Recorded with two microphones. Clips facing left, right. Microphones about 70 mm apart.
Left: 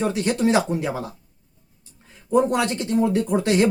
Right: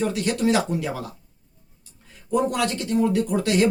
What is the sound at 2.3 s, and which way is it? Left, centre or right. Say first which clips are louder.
Speech: left 3 dB; left.